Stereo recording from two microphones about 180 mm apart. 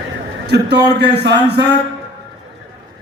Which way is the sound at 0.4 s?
65° right (ahead or behind).